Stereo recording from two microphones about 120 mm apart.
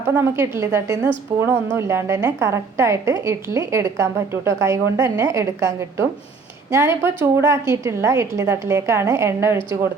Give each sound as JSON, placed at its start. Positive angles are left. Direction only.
{"t": 0.2, "sound": "a woman's voice", "side_deg": -20}